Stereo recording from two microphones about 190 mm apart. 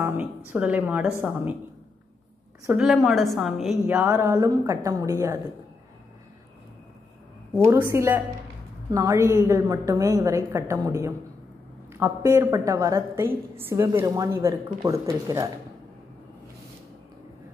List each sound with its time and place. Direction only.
0.0 s a sound: 10° right (ahead or behind)
0.5 s a woman's voice: 10° right (ahead or behind)
2.8 s a woman's voice: centre (ahead or behind)
7.5 s a woman's voice: 15° right (ahead or behind)